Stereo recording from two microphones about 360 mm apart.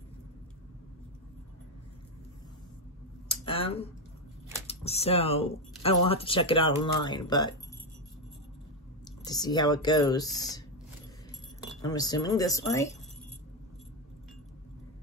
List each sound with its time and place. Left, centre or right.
3.3 s a sound: centre
4.6 s speech: centre
9.2 s speech: centre
11.8 s speech: centre